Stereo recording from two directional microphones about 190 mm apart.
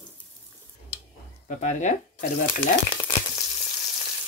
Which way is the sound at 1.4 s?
40° left (ahead or behind).